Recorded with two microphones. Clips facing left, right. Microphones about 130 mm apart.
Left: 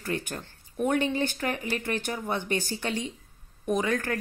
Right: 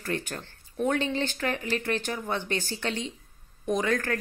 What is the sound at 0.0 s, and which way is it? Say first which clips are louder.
Speech: even; 10° left (ahead or behind).